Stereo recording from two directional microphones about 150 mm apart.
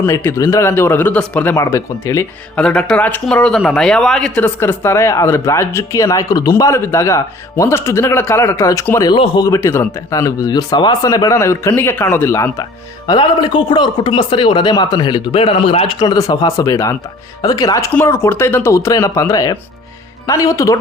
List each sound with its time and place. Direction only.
0.0 s speech: 15° left (ahead or behind)
1.5 s speech: 20° left (ahead or behind)
2.6 s speech: 5° left (ahead or behind); by 9.1 s 20° left (ahead or behind)
9.1 s speech: 35° left (ahead or behind)
13.1 s speech: 30° left (ahead or behind)
16.0 s speech: 25° left (ahead or behind)